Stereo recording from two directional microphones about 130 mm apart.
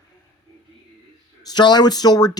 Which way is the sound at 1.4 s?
35° left (ahead or behind).